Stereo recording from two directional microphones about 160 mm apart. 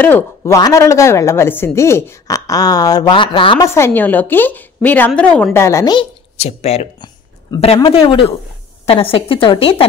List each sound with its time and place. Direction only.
0.4 s speech: 25° left (ahead or behind)
3.6 s a woman's voice: 15° left (ahead or behind)
6.3 s a woman's voice: 40° left (ahead or behind)